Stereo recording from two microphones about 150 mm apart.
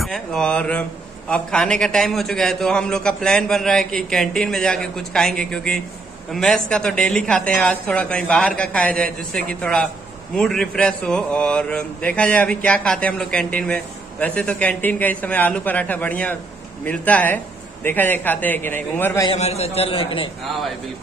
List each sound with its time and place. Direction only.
0.0 s a man's voice: 5° left (ahead or behind)
19.3 s a man's voice: 45° left (ahead or behind)